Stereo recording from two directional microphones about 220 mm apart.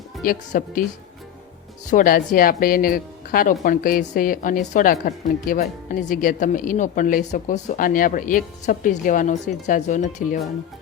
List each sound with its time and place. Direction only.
0.2 s speech: 40° left (ahead or behind)
1.9 s speech: 40° left (ahead or behind)